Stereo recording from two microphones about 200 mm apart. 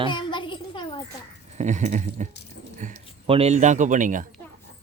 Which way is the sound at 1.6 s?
35° right (ahead or behind).